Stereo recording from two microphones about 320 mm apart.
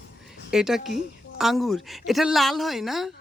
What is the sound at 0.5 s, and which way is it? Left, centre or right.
Speech, centre.